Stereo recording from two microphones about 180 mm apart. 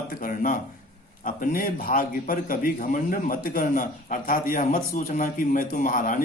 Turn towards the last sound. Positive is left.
turn(degrees=50)  # may be behind; listen again after turning